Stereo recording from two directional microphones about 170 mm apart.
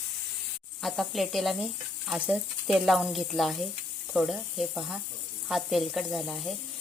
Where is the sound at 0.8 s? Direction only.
Centre (ahead or behind).